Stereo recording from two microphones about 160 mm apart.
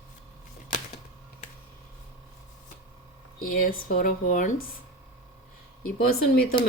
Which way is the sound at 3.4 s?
60° left (ahead or behind).